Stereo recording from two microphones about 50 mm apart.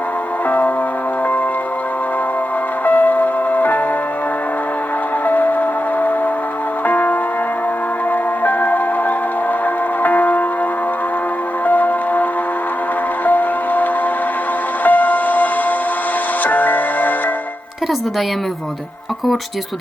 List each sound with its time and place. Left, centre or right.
2.8 s music: left
5.2 s music: left
8.4 s music: left
11.6 s music: left
13.2 s music: left
14.8 s music: left